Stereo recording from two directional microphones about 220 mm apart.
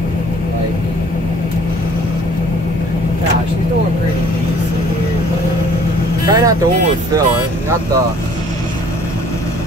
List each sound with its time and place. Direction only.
6.2 s vehicle: 15° right (ahead or behind)